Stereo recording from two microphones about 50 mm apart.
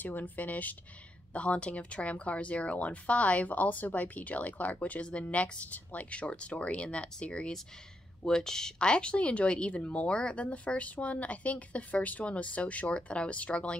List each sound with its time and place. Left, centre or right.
0.0 s speech: left